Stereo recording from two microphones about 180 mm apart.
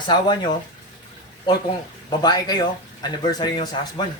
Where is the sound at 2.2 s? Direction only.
20° left (ahead or behind).